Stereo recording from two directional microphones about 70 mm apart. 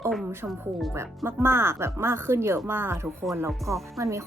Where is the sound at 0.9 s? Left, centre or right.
Right.